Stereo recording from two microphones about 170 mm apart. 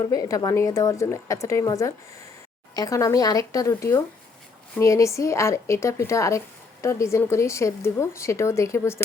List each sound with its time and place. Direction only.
0.0 s a woman's voice: 20° left (ahead or behind)